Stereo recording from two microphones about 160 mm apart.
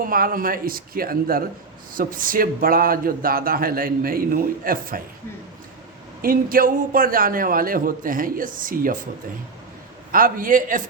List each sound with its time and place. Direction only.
0.0 s speech: 60° right (ahead or behind)
6.2 s speech: 60° right (ahead or behind)
10.1 s speech: 60° right (ahead or behind)